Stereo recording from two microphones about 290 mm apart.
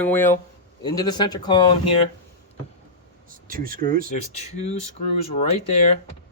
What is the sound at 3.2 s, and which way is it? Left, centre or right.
Speech, right.